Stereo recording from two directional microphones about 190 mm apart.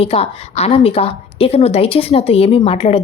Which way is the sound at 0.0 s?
30° left (ahead or behind).